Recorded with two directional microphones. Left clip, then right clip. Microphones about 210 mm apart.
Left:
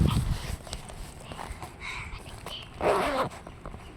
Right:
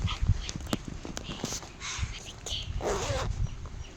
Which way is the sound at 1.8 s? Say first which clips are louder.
Left 3 dB; 35° right (ahead or behind).